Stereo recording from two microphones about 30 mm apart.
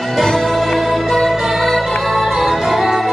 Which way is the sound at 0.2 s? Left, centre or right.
Centre.